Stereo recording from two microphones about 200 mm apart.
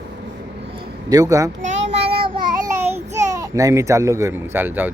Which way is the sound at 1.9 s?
55° right (ahead or behind).